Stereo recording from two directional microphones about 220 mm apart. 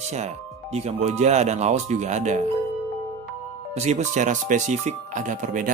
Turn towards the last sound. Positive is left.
turn(degrees=-35)  # may be behind; listen again after turning